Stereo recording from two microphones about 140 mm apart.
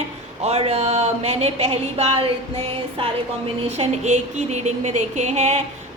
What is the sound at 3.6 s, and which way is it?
A woman's voice, 50° right (ahead or behind).